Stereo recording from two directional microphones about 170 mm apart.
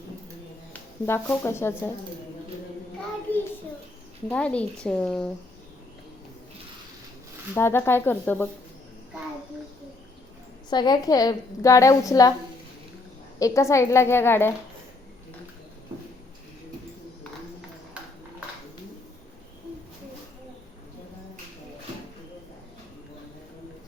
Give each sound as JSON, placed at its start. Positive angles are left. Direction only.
{"t": 0.7, "sound": "speech", "side_deg": 15}
{"t": 3.3, "sound": "child singing", "side_deg": 10}
{"t": 4.3, "sound": "speech", "side_deg": 5}
{"t": 7.5, "sound": "a woman's voice", "side_deg": 15}
{"t": 10.7, "sound": "a woman's voice", "side_deg": 25}
{"t": 13.4, "sound": "a woman's voice", "side_deg": 15}